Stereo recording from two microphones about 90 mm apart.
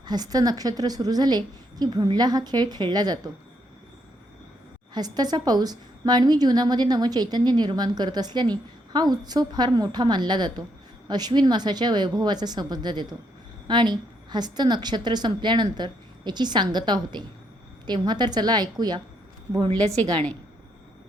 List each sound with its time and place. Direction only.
0.0 s a woman's voice: 50° right (ahead or behind)
4.9 s a woman's voice: 50° right (ahead or behind)